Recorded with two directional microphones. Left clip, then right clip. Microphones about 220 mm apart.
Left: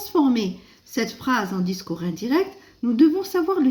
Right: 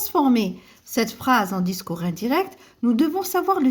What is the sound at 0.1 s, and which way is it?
A woman's voice, 55° right (ahead or behind).